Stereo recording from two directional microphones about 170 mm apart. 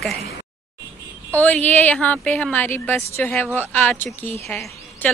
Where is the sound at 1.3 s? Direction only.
10° left (ahead or behind).